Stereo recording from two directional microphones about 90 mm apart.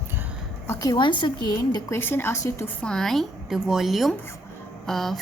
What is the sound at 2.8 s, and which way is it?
A woman's voice, 5° left (ahead or behind).